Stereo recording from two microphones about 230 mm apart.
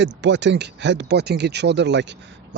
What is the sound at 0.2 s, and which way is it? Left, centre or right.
Speech, right.